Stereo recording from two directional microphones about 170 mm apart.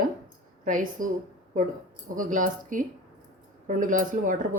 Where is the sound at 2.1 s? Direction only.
50° right (ahead or behind).